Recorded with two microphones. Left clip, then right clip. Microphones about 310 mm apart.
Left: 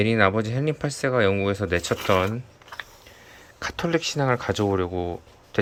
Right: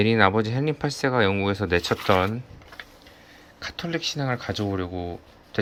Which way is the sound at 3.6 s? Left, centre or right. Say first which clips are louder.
Left 4 dB; centre.